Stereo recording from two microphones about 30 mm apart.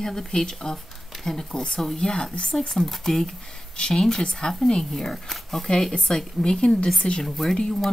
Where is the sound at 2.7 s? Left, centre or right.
Centre.